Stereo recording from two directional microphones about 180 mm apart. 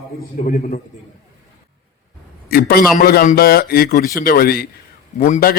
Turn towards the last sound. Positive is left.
turn(degrees=45)  # may be behind; listen again after turning